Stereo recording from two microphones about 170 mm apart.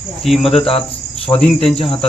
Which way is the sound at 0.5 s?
35° left (ahead or behind).